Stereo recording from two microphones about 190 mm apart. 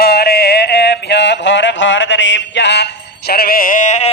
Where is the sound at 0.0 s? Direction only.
55° left (ahead or behind).